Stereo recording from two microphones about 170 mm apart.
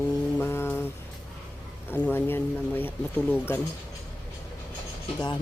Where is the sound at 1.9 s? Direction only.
10° left (ahead or behind).